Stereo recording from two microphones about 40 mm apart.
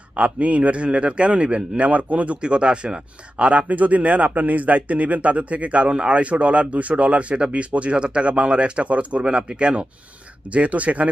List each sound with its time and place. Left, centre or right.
0.1 s speech: right
2.4 s speech: right